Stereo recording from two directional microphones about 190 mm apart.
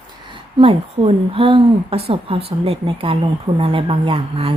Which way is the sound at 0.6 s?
30° right (ahead or behind).